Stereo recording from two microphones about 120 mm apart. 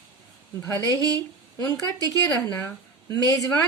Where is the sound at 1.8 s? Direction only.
30° left (ahead or behind).